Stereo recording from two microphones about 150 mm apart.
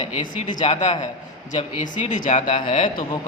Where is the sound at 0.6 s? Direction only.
45° left (ahead or behind).